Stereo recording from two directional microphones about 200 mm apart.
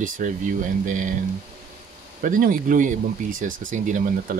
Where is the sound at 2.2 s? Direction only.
45° right (ahead or behind).